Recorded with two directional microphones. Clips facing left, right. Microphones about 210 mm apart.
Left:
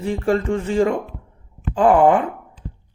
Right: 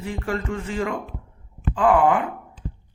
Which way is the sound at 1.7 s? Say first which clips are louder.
Left 4 dB; 30° left (ahead or behind).